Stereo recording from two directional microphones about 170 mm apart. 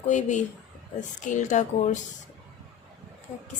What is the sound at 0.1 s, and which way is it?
A woman's voice, 45° left (ahead or behind).